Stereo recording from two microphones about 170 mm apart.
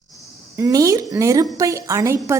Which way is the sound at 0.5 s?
20° right (ahead or behind).